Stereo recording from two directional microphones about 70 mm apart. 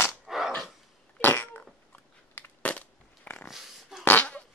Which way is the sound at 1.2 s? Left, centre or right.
Left.